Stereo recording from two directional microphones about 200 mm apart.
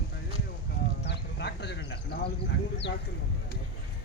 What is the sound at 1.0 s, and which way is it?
Speech, 55° left (ahead or behind).